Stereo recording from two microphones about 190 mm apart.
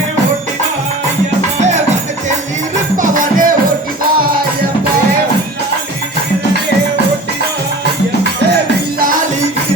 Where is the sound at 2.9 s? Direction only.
45° right (ahead or behind).